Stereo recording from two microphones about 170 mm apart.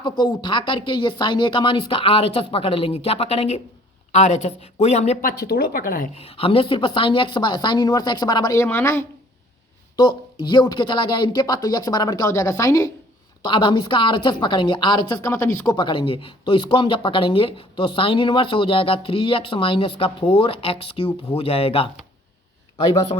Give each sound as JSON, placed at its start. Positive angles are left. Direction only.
{"t": 0.0, "sound": "speech", "side_deg": 25}
{"t": 5.2, "sound": "speech", "side_deg": 65}
{"t": 6.1, "sound": "speech", "side_deg": 35}
{"t": 9.9, "sound": "speech", "side_deg": 25}